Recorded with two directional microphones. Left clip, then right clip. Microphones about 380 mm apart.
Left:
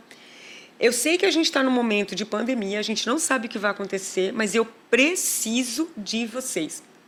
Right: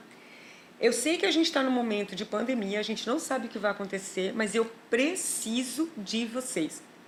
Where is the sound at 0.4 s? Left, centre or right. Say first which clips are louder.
Left 5 dB; left.